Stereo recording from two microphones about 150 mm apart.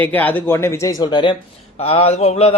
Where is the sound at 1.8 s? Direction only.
45° left (ahead or behind).